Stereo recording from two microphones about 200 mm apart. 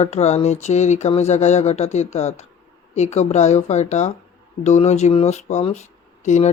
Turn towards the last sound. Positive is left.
turn(degrees=35)  # may be behind; listen again after turning